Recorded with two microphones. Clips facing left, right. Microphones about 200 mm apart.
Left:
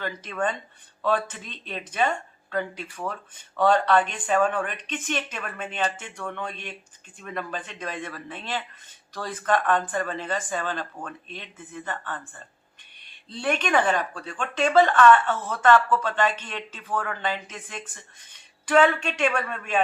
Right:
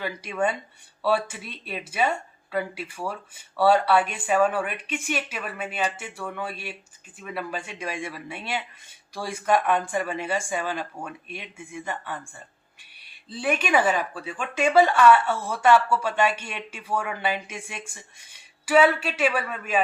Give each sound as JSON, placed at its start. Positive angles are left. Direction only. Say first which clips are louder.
{"t": 0.0, "sound": "speech", "louder": "right 2 dB", "side_deg": -10}